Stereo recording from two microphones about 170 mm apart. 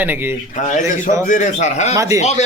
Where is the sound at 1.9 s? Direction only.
20° right (ahead or behind).